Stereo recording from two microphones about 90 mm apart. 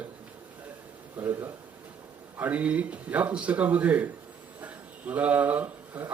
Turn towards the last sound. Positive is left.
turn(degrees=-15)  # may be behind; listen again after turning